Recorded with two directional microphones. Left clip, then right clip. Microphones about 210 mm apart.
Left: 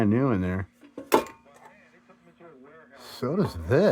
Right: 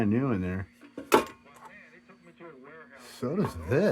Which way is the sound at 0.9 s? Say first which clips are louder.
Even; 5° left (ahead or behind).